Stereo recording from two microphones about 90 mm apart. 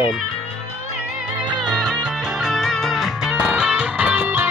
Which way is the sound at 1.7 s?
5° right (ahead or behind).